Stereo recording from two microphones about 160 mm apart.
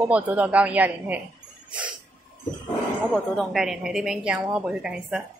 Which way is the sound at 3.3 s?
Centre (ahead or behind).